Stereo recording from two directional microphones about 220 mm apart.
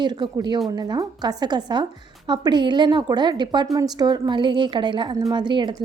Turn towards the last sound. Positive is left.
turn(degrees=-20)  # may be behind; listen again after turning